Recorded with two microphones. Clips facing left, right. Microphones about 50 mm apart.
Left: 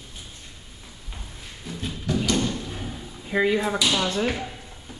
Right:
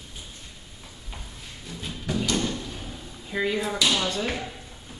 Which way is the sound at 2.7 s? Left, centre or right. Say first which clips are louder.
Left 3 dB; centre.